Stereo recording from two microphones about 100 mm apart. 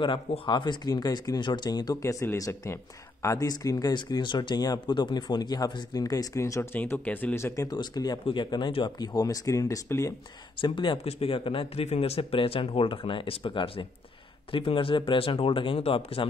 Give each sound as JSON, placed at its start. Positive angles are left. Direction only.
{"t": 0.5, "sound": "speech", "side_deg": 50}
{"t": 6.7, "sound": "speech", "side_deg": 20}
{"t": 7.6, "sound": "speech", "side_deg": 40}
{"t": 10.6, "sound": "speech", "side_deg": 55}
{"t": 11.1, "sound": "speech", "side_deg": 70}